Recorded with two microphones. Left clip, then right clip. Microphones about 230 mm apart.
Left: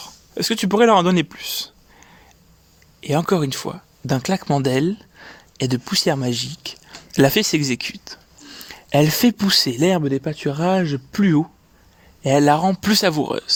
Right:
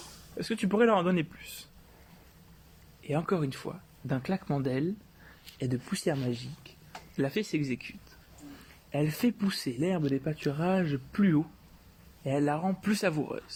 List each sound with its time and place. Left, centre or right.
0.3 s speech: left
3.0 s speech: left